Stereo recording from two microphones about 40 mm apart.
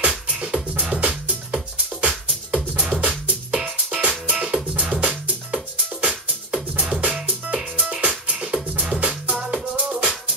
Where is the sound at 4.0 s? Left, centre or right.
Right.